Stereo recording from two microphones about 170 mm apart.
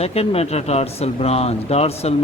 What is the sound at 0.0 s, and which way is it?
Speech, 35° left (ahead or behind).